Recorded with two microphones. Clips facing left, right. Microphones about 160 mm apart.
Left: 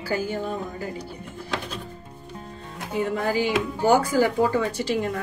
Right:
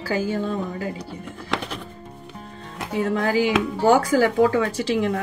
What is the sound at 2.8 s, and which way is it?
Speech, 90° right.